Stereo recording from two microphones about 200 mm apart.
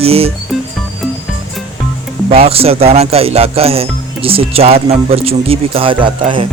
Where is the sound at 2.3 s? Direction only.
30° right (ahead or behind).